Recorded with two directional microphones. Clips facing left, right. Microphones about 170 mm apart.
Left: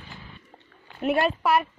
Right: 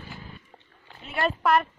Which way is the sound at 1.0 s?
60° left (ahead or behind).